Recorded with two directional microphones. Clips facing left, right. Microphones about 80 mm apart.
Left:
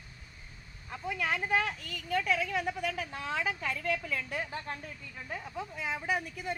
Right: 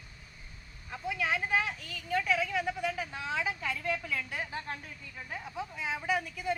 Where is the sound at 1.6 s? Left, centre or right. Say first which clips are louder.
Left 1 dB; left.